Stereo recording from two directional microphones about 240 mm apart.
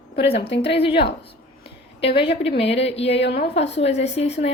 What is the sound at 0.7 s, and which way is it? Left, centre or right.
Speech, left.